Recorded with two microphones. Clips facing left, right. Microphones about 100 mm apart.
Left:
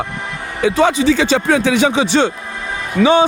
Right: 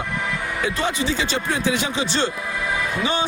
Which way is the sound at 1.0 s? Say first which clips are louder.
Left 10 dB; 75° left (ahead or behind).